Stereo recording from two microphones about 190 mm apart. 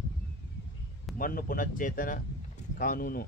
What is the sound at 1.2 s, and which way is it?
A man's voice, 50° left (ahead or behind).